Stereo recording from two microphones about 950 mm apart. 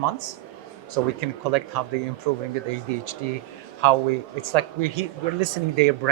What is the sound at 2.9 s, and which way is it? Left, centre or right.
Speech, right.